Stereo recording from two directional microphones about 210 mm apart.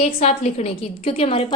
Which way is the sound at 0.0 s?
30° left (ahead or behind).